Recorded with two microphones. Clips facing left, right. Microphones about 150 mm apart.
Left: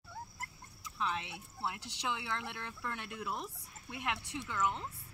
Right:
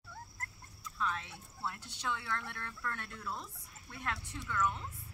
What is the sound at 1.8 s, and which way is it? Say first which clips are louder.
Speech: left 4 dB; 90° left.